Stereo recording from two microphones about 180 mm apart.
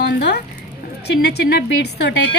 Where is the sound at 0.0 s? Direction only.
65° left (ahead or behind).